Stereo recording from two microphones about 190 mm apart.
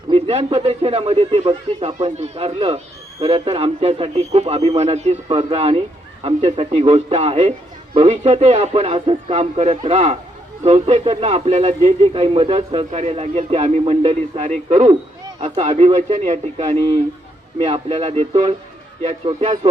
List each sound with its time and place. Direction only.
0.1 s a man's voice: 35° right (ahead or behind)